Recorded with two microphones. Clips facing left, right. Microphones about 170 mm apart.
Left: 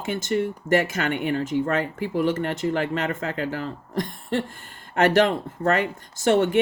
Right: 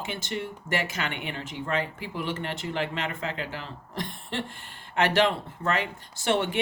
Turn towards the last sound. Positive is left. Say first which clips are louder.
# left 7 dB
turn(degrees=45)  # may be behind; listen again after turning